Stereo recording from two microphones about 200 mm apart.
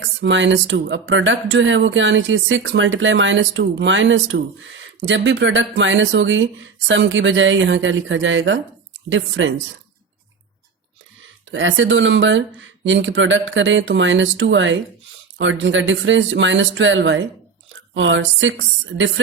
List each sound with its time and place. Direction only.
0.2 s speech: 65° right (ahead or behind)
11.5 s speech: 70° right (ahead or behind)